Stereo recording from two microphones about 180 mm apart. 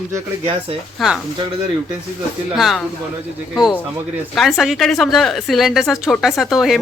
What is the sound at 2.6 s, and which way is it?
Speech, centre (ahead or behind).